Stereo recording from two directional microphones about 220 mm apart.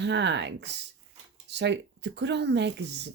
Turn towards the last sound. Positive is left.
turn(degrees=-50)  # may be behind; listen again after turning